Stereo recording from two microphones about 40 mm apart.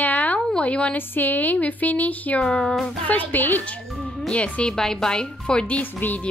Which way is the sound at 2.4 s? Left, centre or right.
Centre.